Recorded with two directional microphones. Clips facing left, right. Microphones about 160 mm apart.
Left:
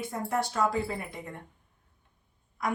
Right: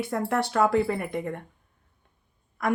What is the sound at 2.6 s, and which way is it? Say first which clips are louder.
Speech: right 6 dB; 55° right (ahead or behind).